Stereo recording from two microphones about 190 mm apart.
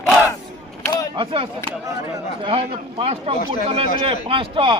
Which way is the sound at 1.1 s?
25° right (ahead or behind).